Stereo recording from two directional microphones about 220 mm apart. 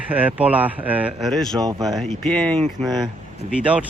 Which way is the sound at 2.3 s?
5° left (ahead or behind).